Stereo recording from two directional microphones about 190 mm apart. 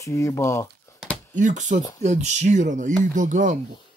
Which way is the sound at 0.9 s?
15° left (ahead or behind).